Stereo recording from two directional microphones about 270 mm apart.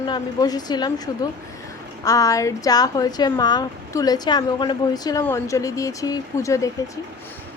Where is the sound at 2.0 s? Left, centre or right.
Centre.